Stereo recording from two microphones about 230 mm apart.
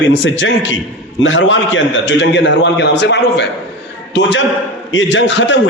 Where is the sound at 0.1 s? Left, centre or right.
Left.